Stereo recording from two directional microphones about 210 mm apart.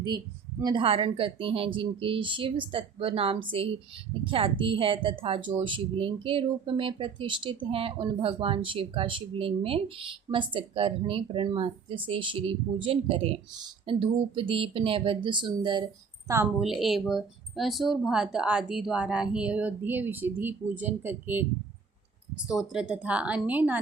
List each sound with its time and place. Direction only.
0.6 s a woman's voice: 25° right (ahead or behind)
16.6 s speech: centre (ahead or behind)
22.4 s speech: centre (ahead or behind)